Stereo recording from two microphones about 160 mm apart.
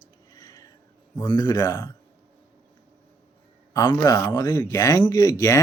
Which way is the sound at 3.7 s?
25° left (ahead or behind).